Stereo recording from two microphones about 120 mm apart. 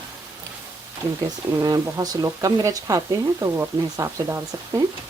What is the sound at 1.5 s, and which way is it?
Speech, 30° right (ahead or behind).